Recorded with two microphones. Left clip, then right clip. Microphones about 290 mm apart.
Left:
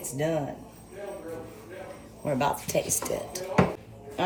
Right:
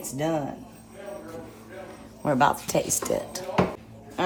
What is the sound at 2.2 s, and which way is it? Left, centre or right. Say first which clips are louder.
Speech: right 5 dB; right.